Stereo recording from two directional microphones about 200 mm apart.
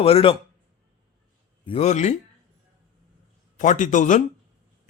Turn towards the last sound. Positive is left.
turn(degrees=40)  # may be behind; listen again after turning